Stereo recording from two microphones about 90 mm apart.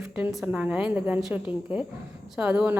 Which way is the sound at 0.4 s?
15° right (ahead or behind).